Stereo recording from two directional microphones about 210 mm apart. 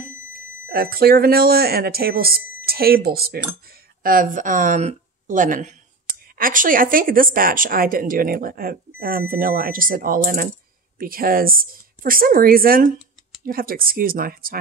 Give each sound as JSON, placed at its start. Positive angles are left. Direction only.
{"t": 0.0, "sound": "a woman's voice", "side_deg": -45}